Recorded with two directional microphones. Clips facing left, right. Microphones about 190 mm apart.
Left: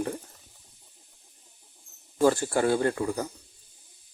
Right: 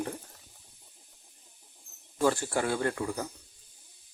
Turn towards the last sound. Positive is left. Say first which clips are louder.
# left 4 dB
turn(degrees=35)  # may be behind; listen again after turning